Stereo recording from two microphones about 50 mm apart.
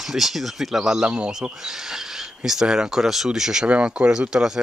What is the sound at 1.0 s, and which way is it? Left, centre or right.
Speech, right.